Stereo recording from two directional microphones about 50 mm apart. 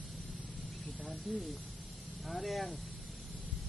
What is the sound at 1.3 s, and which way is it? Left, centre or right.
Speech, centre.